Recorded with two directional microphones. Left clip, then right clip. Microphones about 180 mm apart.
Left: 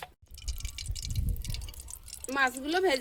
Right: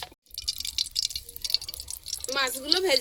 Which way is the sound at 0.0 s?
5° left (ahead or behind).